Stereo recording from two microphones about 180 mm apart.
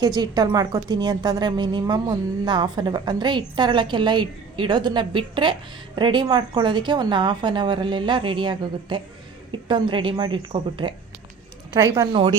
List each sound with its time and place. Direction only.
0.0 s a woman's voice: 20° right (ahead or behind)